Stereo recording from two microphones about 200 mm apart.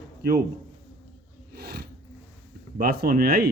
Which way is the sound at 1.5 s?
50° right (ahead or behind).